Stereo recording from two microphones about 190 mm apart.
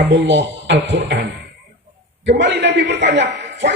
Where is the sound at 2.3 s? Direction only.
65° right (ahead or behind).